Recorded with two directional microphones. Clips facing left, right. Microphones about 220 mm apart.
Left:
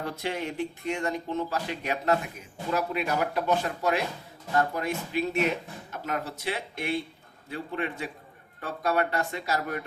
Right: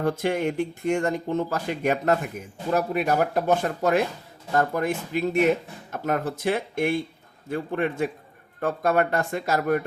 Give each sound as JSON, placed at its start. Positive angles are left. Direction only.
{"t": 0.0, "sound": "speech", "side_deg": -50}